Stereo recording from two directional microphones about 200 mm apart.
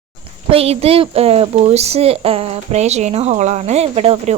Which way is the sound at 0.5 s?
30° right (ahead or behind).